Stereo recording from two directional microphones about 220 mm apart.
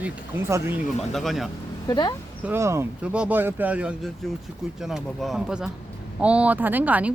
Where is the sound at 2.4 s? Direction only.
10° right (ahead or behind).